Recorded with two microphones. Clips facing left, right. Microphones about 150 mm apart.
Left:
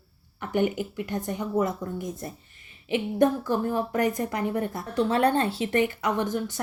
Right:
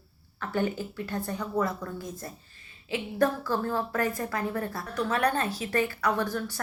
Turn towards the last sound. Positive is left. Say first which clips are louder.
# left 2 dB
turn(degrees=20)  # may be behind; listen again after turning